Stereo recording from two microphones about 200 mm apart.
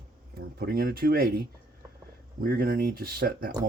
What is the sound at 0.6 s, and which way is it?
Speech, 50° right (ahead or behind).